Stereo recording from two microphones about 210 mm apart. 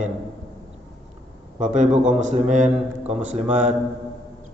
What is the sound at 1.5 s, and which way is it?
A man's voice, 35° right (ahead or behind).